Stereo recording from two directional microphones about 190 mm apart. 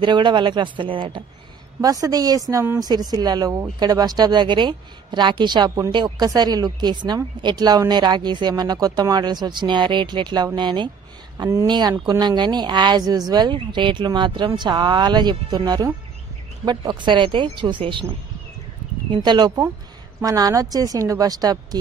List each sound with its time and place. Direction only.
0.0 s speech: 25° right (ahead or behind)
19.2 s a woman's voice: 20° right (ahead or behind)